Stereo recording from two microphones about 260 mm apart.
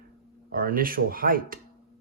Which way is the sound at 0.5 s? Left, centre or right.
Right.